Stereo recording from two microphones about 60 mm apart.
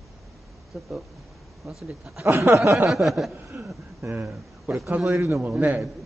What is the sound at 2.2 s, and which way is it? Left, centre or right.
Speech, right.